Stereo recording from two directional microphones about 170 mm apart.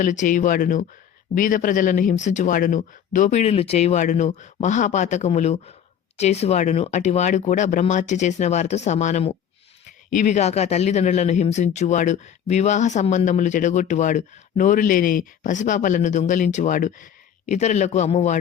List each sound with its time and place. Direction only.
0.0 s speech: 50° left (ahead or behind)